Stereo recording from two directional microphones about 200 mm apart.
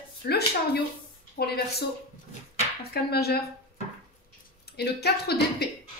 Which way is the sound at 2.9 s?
50° left (ahead or behind).